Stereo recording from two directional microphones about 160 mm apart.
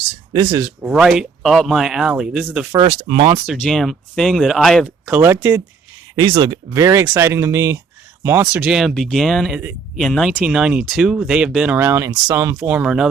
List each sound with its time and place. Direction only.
0.3 s speech: 20° right (ahead or behind)
2.7 s speech: 35° right (ahead or behind)
3.6 s speech: centre (ahead or behind)
5.0 s speech: 15° right (ahead or behind)
6.1 s speech: 30° right (ahead or behind); by 8.4 s 15° right (ahead or behind)
8.5 s speech: 5° right (ahead or behind)